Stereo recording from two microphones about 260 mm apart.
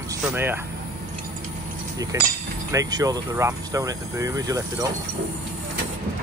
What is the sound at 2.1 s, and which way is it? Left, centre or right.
Speech, centre.